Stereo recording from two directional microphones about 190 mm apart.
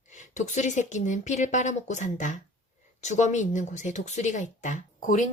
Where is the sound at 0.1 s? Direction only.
40° left (ahead or behind).